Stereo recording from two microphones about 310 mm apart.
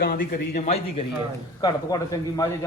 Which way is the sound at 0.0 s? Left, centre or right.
Left.